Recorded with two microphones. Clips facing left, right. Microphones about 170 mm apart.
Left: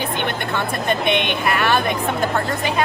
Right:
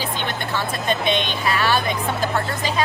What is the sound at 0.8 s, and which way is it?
A woman's voice, 60° left (ahead or behind).